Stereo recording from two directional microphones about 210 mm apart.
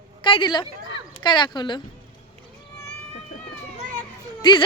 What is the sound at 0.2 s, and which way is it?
Speech, 25° left (ahead or behind).